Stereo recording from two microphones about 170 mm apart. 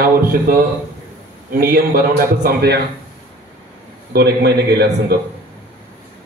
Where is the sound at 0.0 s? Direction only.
55° right (ahead or behind).